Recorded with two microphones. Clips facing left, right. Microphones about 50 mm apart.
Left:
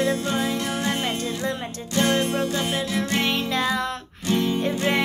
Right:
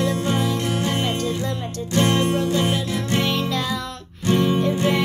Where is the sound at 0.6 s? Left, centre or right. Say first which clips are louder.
Right 3 dB; right.